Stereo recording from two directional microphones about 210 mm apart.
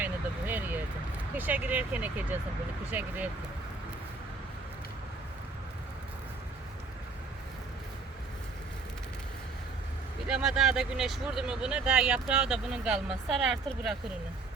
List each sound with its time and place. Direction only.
0.0 s a sound: 10° right (ahead or behind)
1.4 s speech: 10° right (ahead or behind)
10.2 s speech: 5° right (ahead or behind)